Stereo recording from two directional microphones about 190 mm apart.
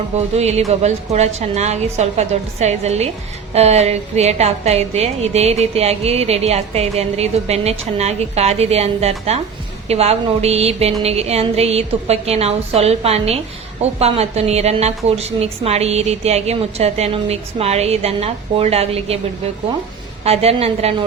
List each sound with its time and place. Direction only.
0.3 s a woman's voice: 35° right (ahead or behind)
20.2 s a woman's voice: 35° right (ahead or behind)